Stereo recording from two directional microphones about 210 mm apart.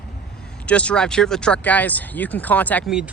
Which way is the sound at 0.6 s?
5° left (ahead or behind).